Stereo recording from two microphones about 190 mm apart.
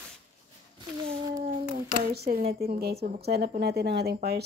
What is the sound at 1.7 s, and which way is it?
Speech, 55° right (ahead or behind).